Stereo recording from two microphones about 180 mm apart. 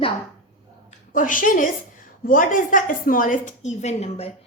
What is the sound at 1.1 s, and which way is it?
A woman's voice, 45° left (ahead or behind).